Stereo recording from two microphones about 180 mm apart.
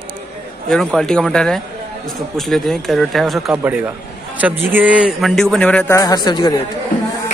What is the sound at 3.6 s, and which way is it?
A man's voice, 15° right (ahead or behind).